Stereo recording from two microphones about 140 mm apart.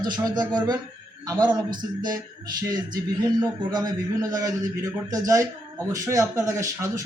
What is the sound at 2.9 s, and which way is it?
A man's voice, 25° right (ahead or behind).